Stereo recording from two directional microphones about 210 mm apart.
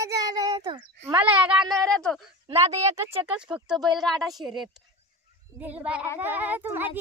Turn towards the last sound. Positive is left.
turn(degrees=-10)  # may be behind; listen again after turning